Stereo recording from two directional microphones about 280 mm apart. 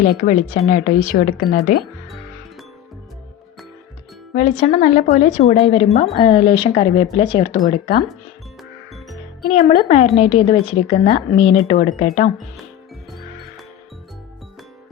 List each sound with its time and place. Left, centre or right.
0.0 s speech: left
4.4 s speech: left
9.4 s speech: left